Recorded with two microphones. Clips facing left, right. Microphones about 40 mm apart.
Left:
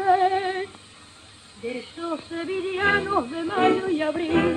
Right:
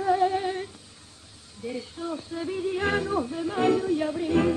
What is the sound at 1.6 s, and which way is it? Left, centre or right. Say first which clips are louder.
Yodeling: left 2 dB; left.